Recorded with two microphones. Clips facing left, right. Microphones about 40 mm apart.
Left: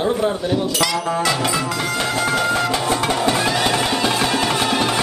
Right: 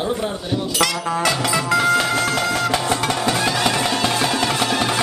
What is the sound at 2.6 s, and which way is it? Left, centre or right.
Music, centre.